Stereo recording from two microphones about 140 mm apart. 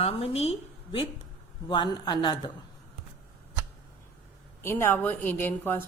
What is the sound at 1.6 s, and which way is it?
Speech, 35° left (ahead or behind).